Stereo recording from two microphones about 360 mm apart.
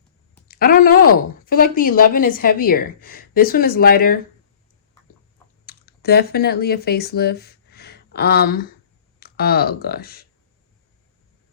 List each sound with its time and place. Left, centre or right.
0.4 s a woman's voice: left
5.6 s a woman's voice: left